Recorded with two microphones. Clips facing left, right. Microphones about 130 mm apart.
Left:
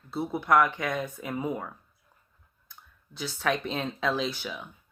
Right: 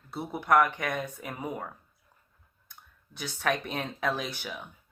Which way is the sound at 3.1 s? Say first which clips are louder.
Left 1 dB; 55° right (ahead or behind).